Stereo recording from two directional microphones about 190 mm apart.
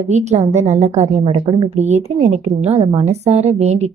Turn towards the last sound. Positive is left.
turn(degrees=-35)  # may be behind; listen again after turning